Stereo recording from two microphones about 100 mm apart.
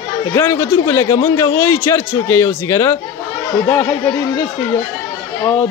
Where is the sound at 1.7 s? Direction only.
20° left (ahead or behind).